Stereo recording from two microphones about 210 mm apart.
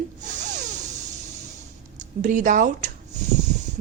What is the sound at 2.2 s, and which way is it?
Speech, 35° right (ahead or behind).